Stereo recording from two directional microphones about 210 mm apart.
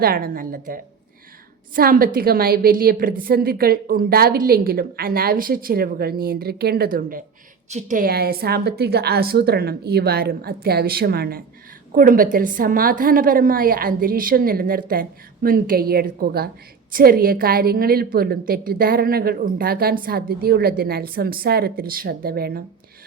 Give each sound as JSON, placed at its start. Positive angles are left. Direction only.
{"t": 0.0, "sound": "a woman's voice", "side_deg": -45}